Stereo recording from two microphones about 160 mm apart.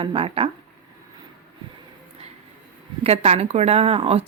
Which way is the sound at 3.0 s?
40° right (ahead or behind).